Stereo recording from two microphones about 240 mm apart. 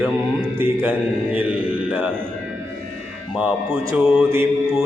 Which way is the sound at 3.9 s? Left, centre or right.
Centre.